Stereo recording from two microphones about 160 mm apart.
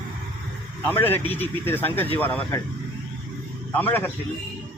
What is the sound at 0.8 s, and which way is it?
Speech, 15° left (ahead or behind).